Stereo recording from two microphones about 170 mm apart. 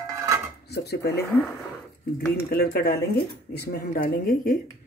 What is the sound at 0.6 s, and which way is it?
Dishes, 75° left (ahead or behind).